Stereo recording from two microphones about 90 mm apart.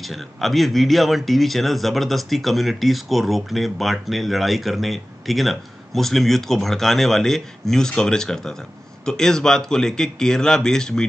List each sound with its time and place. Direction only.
0.0 s speech: centre (ahead or behind)